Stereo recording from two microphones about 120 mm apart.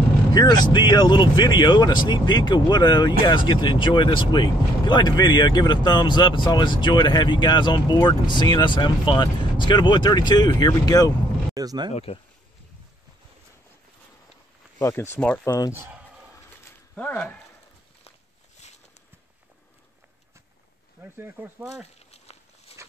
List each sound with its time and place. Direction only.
0.3 s speech: 35° left (ahead or behind)
11.5 s speech: 30° right (ahead or behind)
11.9 s speech: 55° left (ahead or behind)
14.8 s speech: 25° left (ahead or behind)
15.1 s speech: 10° left (ahead or behind)
15.4 s speech: 30° left (ahead or behind)
15.7 s a sound: 15° right (ahead or behind)
16.9 s speech: 15° left (ahead or behind)
21.0 s speech: 15° right (ahead or behind)
21.8 s a sound: 60° left (ahead or behind)